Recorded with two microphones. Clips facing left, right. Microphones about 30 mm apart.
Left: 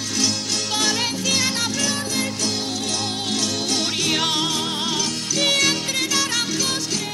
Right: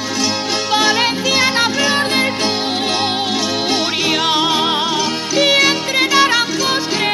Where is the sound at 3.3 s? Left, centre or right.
Right.